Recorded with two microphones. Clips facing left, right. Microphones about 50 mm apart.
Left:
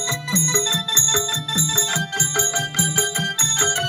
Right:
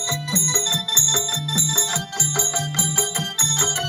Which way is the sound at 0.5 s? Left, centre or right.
Left.